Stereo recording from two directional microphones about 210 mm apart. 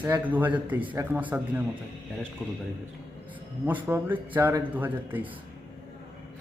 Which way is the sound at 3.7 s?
10° right (ahead or behind).